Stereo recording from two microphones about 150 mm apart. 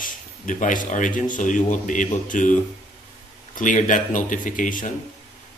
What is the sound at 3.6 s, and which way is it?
Speech, 60° left (ahead or behind).